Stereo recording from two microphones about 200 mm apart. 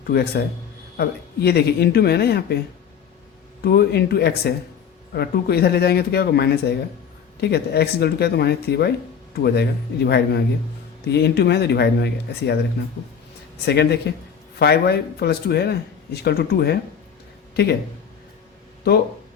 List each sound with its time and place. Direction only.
0.1 s speech: 55° left (ahead or behind)
3.6 s speech: 50° left (ahead or behind)
13.7 s speech: 55° left (ahead or behind)